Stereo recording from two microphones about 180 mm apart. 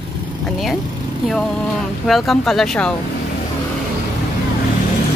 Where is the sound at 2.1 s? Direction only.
Centre (ahead or behind).